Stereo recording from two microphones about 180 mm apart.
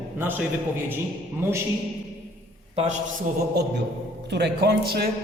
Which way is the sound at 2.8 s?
40° right (ahead or behind).